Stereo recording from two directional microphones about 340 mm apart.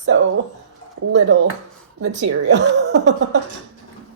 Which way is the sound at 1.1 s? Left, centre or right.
Right.